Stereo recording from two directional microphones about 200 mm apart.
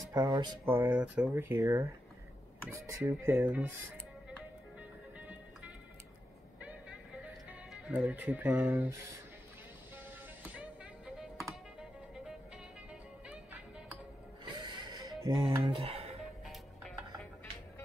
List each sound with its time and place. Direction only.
0.1 s speech: 20° right (ahead or behind)
4.7 s music: 5° right (ahead or behind)
7.7 s speech: 5° right (ahead or behind)
10.5 s music: 5° right (ahead or behind)
14.4 s music: 20° right (ahead or behind)
16.4 s music: centre (ahead or behind)